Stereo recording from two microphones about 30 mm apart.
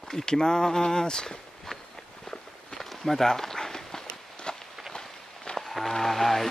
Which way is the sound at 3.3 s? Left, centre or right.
Centre.